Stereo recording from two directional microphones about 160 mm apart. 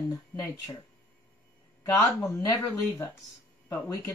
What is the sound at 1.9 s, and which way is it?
Speech, 20° left (ahead or behind).